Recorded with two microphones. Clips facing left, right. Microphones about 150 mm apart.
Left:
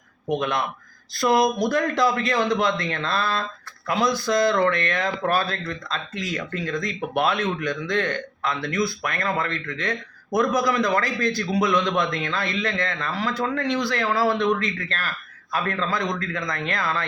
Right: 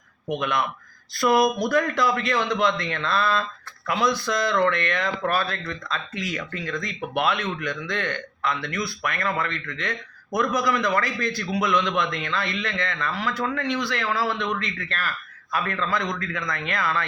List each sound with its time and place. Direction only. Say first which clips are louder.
0.3 s a man's voice: left 1 dB; 35° left (ahead or behind)